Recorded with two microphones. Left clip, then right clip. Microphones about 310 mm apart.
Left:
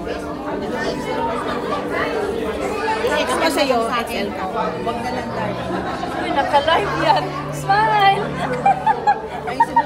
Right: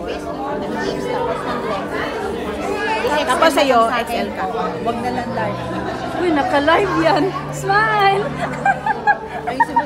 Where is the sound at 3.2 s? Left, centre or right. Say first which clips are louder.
Right 3 dB; centre.